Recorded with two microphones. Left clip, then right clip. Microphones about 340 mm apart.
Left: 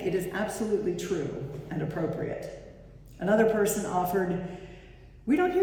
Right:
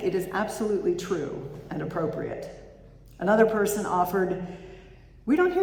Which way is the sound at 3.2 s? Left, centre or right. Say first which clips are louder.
Right 2 dB; centre.